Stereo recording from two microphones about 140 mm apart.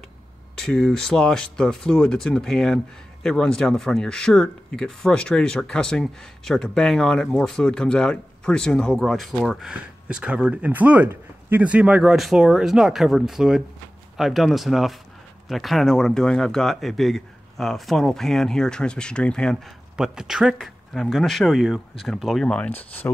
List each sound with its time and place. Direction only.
0.6 s speech: 5° left (ahead or behind)